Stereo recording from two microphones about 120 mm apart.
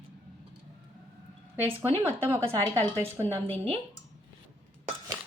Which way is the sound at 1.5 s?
15° right (ahead or behind).